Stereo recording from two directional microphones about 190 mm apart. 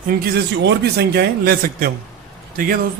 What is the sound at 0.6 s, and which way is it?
A man's voice, 60° right (ahead or behind).